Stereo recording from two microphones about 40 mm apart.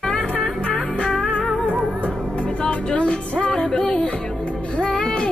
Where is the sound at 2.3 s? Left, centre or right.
Left.